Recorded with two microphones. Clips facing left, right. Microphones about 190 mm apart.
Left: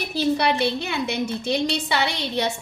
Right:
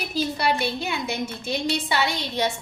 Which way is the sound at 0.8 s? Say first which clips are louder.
Left 3 dB; 65° left (ahead or behind).